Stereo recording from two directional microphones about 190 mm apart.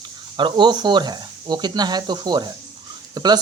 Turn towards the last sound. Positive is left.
turn(degrees=-20)  # may be behind; listen again after turning